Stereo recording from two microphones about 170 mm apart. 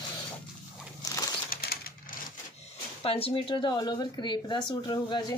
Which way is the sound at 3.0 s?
35° left (ahead or behind).